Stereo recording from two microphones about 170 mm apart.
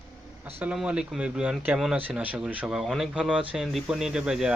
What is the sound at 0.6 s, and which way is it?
Speech, 5° right (ahead or behind).